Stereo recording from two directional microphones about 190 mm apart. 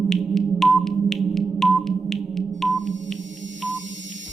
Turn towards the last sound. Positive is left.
turn(degrees=0)  # may be behind; listen again after turning